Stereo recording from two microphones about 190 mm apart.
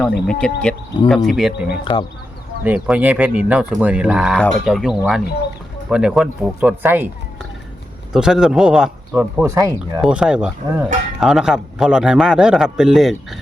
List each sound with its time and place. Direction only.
0.3 s a man's voice: 5° left (ahead or behind)
1.8 s speech: 25° left (ahead or behind)
2.6 s a man's voice: 5° right (ahead or behind)
8.1 s a man's voice: 5° right (ahead or behind)
10.0 s a man's voice: 5° right (ahead or behind)